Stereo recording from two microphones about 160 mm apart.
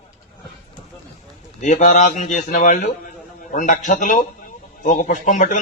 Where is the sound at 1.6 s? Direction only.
50° left (ahead or behind).